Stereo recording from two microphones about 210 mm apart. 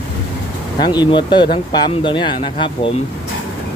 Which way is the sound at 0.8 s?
20° left (ahead or behind).